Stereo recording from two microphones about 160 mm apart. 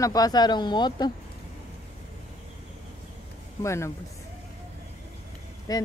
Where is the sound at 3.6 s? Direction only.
15° left (ahead or behind).